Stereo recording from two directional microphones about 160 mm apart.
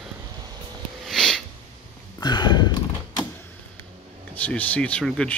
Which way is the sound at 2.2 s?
25° left (ahead or behind).